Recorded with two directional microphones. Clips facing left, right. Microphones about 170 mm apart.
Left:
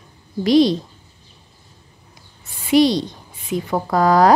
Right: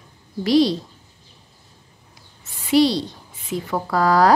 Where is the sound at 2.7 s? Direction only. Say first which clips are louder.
Left 2 dB; 20° left (ahead or behind).